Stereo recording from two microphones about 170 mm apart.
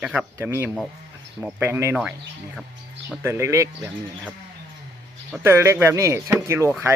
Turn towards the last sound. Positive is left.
turn(degrees=-15)  # may be behind; listen again after turning